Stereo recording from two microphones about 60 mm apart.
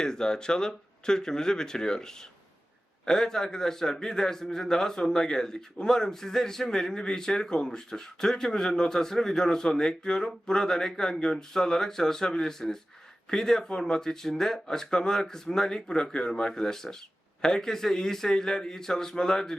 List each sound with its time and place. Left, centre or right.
0.0 s a man's voice: centre